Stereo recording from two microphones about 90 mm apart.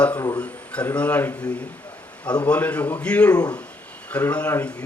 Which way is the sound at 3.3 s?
45° left (ahead or behind).